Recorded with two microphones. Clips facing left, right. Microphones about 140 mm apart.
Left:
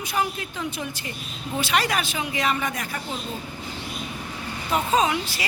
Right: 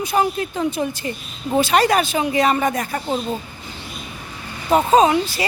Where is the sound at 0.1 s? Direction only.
35° right (ahead or behind).